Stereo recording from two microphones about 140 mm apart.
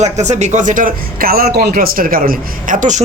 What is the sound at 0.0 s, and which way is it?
Speech, 55° right (ahead or behind).